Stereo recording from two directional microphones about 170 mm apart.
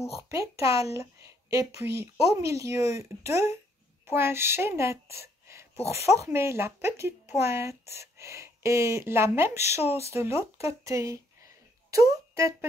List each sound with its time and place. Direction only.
0.3 s a woman's voice: 20° right (ahead or behind)
5.5 s a sound: 15° right (ahead or behind)
6.2 s speech: 15° right (ahead or behind)